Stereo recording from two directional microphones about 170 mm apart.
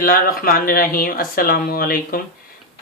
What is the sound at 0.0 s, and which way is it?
Speech, 55° left (ahead or behind).